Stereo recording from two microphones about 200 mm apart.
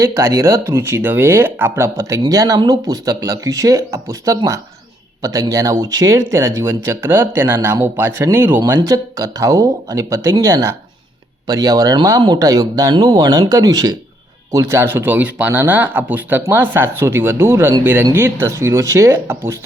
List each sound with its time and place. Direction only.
0.0 s speech: 15° right (ahead or behind)